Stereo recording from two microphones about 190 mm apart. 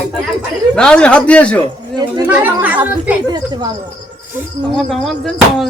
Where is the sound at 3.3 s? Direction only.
20° right (ahead or behind).